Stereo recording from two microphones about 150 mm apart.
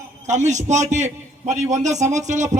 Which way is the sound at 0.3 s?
50° right (ahead or behind).